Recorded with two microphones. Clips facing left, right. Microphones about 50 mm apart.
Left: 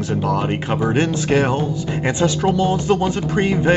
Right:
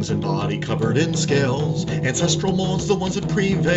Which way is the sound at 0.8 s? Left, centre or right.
Left.